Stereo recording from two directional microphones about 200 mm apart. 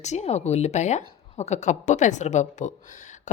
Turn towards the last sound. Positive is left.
turn(degrees=35)  # may be behind; listen again after turning